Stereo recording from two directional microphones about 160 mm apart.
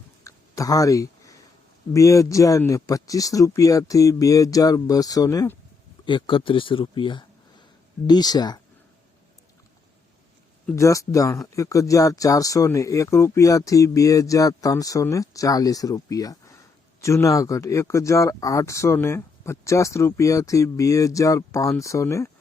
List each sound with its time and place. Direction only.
0.3 s a sound: 20° left (ahead or behind)
1.9 s speech: 20° left (ahead or behind)
10.8 s speech: 20° left (ahead or behind)